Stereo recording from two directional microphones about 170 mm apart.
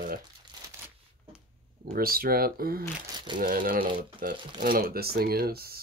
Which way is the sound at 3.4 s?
55° right (ahead or behind).